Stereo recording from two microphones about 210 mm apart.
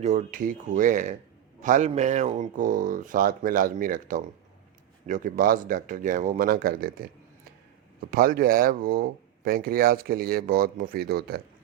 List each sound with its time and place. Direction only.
0.0 s speech: 35° right (ahead or behind)
8.1 s speech: 45° right (ahead or behind)